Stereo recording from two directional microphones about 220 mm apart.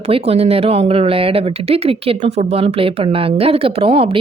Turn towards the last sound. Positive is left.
turn(degrees=-25)  # may be behind; listen again after turning